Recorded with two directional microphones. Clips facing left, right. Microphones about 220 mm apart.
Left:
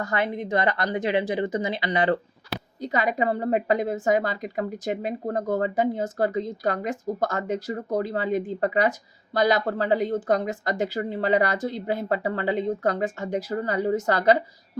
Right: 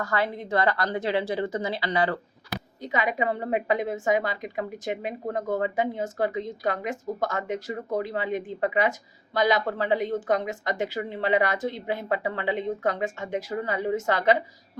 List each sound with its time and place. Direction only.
0.0 s a woman's voice: 20° left (ahead or behind)
2.8 s a woman's voice: 40° left (ahead or behind)